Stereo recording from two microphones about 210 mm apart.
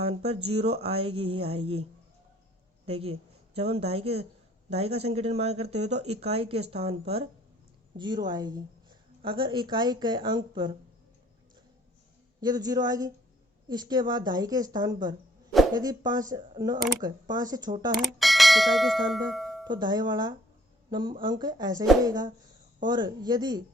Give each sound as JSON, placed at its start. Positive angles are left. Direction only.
{"t": 0.0, "sound": "a woman's voice", "side_deg": -30}
{"t": 2.8, "sound": "a woman's voice", "side_deg": -30}
{"t": 12.4, "sound": "a woman's voice", "side_deg": -20}
{"t": 17.9, "sound": "speech", "side_deg": 0}
{"t": 19.6, "sound": "a woman's voice", "side_deg": -20}